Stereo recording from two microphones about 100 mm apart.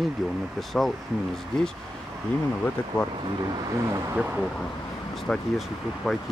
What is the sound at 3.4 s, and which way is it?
Speech, 40° right (ahead or behind).